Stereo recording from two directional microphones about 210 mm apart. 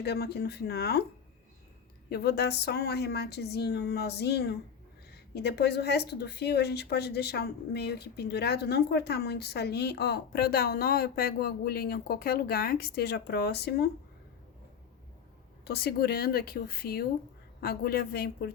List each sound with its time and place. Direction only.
0.0 s speech: 50° left (ahead or behind)
2.0 s speech: 50° left (ahead or behind)
15.6 s speech: 50° left (ahead or behind)